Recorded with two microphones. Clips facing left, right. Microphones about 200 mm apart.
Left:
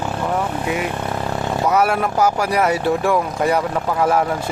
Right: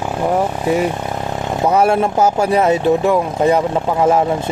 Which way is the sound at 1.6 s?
25° right (ahead or behind).